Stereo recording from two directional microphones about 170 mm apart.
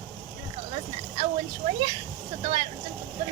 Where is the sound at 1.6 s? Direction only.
30° right (ahead or behind).